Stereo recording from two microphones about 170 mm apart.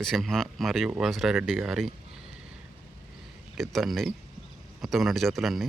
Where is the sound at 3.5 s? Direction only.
Centre (ahead or behind).